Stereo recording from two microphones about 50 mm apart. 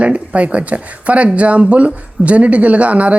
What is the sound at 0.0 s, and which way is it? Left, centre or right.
A woman's voice, right.